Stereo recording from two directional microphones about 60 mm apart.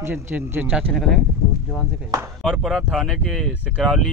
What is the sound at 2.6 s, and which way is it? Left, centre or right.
Speech, centre.